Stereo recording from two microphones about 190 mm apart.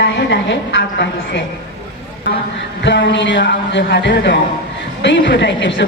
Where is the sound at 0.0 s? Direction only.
65° left (ahead or behind).